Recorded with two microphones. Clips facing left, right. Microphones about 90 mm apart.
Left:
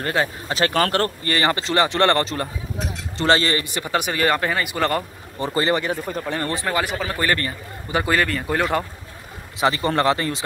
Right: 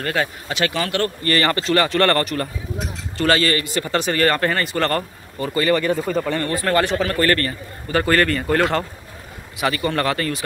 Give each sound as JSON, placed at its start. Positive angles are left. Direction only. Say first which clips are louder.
{"t": 0.0, "sound": "speech", "louder": "even", "side_deg": 25}
{"t": 1.2, "sound": "a man's voice", "louder": "right 2 dB", "side_deg": 20}
{"t": 5.4, "sound": "speech", "louder": "right 2 dB", "side_deg": 25}
{"t": 5.9, "sound": "speech", "louder": "right 6 dB", "side_deg": 5}
{"t": 6.4, "sound": "speech", "louder": "right 2 dB", "side_deg": 20}
{"t": 6.7, "sound": "a man's voice", "louder": "right 8 dB", "side_deg": 5}
{"t": 9.6, "sound": "speech", "louder": "left 1 dB", "side_deg": 30}